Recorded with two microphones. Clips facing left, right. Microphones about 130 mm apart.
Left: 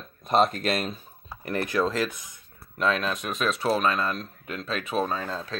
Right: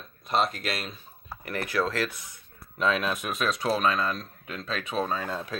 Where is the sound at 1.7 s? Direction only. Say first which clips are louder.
Left 1 dB; 15° left (ahead or behind).